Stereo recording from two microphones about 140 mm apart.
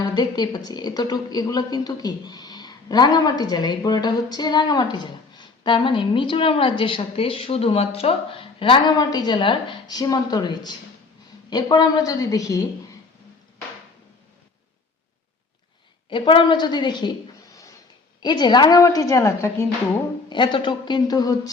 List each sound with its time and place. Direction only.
0.0 s a woman's voice: 30° left (ahead or behind)
16.0 s a woman's voice: 35° left (ahead or behind); by 20.0 s 20° left (ahead or behind)
20.3 s a woman's voice: 35° left (ahead or behind)